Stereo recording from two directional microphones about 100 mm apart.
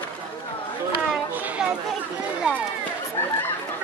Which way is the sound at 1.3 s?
15° right (ahead or behind).